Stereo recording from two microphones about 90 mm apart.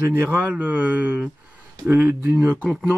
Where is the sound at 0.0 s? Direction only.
25° right (ahead or behind).